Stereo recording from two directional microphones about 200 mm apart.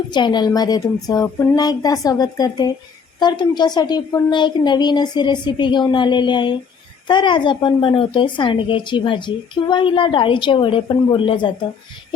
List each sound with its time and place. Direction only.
0.1 s speech: 20° left (ahead or behind)